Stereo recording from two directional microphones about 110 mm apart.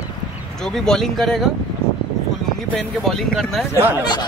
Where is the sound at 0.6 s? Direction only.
5° left (ahead or behind).